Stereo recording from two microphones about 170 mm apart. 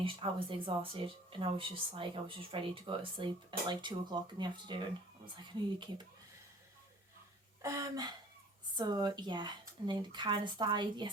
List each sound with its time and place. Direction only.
0.0 s speech: 30° right (ahead or behind)
7.6 s speech: 20° right (ahead or behind)